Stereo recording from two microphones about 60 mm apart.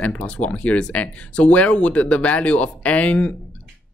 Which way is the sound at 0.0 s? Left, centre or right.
Left.